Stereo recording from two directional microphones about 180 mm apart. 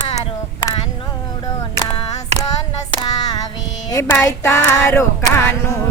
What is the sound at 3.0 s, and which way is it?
Child singing, 20° left (ahead or behind).